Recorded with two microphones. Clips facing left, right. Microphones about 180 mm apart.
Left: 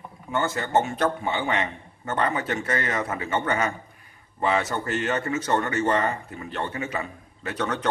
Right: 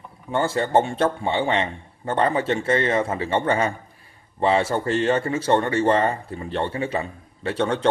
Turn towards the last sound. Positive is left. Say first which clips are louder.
# right 5 dB
turn(degrees=-30)  # may be behind; listen again after turning